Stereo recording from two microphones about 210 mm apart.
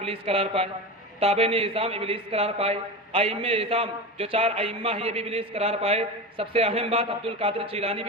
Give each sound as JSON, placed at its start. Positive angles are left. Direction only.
{"t": 0.0, "sound": "a man's voice", "side_deg": -30}